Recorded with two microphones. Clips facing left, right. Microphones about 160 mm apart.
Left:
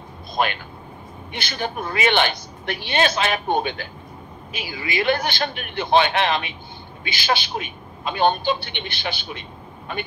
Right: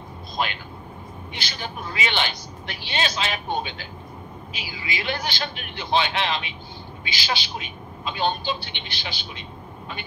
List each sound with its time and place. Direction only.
0.4 s speech: 55° left (ahead or behind)